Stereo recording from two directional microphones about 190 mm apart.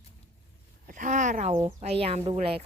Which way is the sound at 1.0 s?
40° right (ahead or behind).